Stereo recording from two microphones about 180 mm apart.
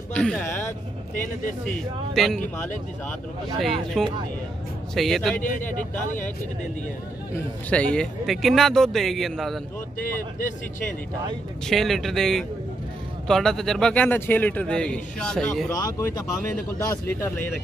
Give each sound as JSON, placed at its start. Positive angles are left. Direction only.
{"t": 0.1, "sound": "a man's voice", "side_deg": 5}
{"t": 1.7, "sound": "a man's voice", "side_deg": 5}
{"t": 3.5, "sound": "a man's voice", "side_deg": 0}
{"t": 5.4, "sound": "speech", "side_deg": 45}
{"t": 7.7, "sound": "a man's voice", "side_deg": 5}
{"t": 9.9, "sound": "speech", "side_deg": 50}
{"t": 11.6, "sound": "a man's voice", "side_deg": 0}
{"t": 15.7, "sound": "a man's voice", "side_deg": 20}